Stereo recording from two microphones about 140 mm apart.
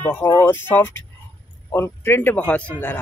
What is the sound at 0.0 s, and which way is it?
A man's voice, 15° left (ahead or behind).